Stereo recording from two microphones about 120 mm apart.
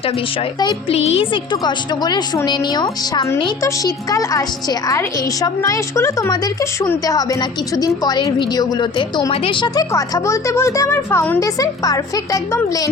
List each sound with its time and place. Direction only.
0.9 s a woman's voice: 60° left (ahead or behind); by 9.8 s 40° left (ahead or behind)
9.9 s a woman's voice: 25° left (ahead or behind)